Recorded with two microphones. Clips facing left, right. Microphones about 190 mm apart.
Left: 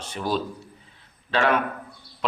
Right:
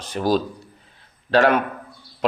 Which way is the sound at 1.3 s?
40° right (ahead or behind).